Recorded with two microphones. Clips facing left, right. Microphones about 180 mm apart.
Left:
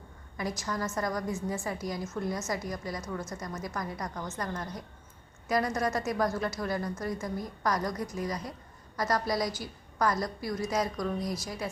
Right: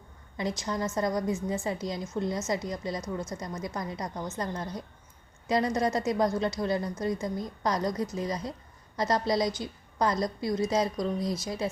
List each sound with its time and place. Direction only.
0.3 s a woman's voice: 25° right (ahead or behind)